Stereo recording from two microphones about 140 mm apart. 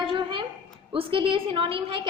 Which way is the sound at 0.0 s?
40° right (ahead or behind).